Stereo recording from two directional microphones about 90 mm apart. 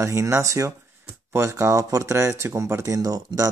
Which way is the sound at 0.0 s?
30° right (ahead or behind).